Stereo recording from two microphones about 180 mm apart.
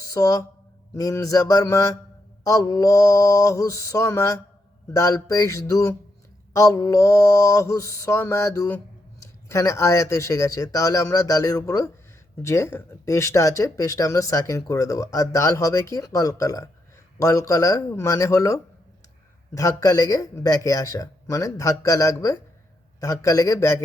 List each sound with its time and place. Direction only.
0.1 s speech: 20° left (ahead or behind)